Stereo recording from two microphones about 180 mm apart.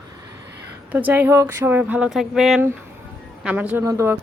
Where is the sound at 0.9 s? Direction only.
10° right (ahead or behind).